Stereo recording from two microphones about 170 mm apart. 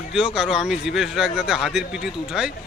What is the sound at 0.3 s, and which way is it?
Speech, 5° right (ahead or behind).